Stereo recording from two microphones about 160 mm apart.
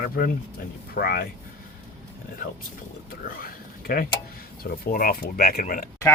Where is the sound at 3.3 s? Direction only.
65° left (ahead or behind).